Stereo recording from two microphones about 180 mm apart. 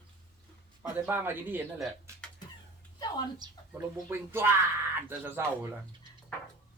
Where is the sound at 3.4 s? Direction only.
15° right (ahead or behind).